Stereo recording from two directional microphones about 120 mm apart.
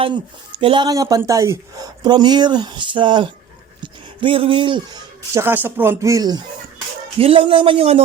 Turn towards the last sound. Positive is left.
turn(degrees=-55)  # may be behind; listen again after turning